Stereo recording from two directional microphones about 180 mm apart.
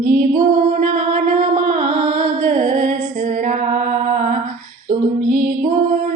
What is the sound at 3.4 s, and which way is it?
Mantra, 45° right (ahead or behind).